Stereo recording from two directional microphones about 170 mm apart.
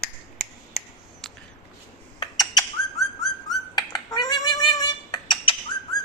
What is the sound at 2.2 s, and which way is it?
Squawk, 20° left (ahead or behind).